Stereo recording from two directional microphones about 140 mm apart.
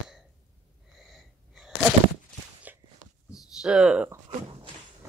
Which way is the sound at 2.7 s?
10° right (ahead or behind).